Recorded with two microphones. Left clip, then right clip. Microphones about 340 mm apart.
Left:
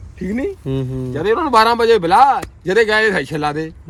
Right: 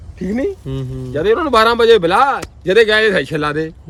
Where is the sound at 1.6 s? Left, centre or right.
Right.